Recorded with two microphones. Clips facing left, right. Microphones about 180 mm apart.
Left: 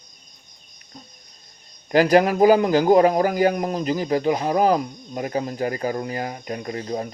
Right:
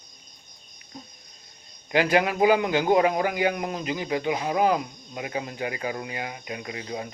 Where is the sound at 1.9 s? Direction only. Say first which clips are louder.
Left 6 dB; 40° left (ahead or behind).